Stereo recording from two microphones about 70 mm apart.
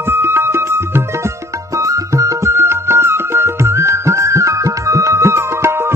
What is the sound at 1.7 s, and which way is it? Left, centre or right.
Music, right.